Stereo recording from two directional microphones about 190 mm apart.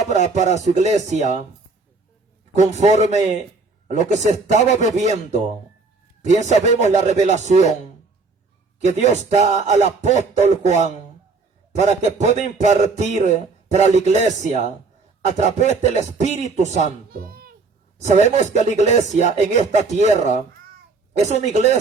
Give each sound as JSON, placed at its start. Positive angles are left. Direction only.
{"t": 0.1, "sound": "a man's voice", "side_deg": -35}
{"t": 2.5, "sound": "a man's voice", "side_deg": -35}
{"t": 8.8, "sound": "a man's voice", "side_deg": -35}
{"t": 17.1, "sound": "a sound", "side_deg": -50}
{"t": 17.9, "sound": "a man's voice", "side_deg": -35}